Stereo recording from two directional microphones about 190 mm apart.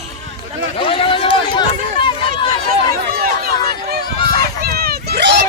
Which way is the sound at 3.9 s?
55° right (ahead or behind).